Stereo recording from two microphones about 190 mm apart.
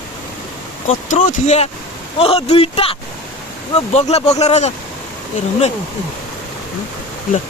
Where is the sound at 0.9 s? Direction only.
40° left (ahead or behind).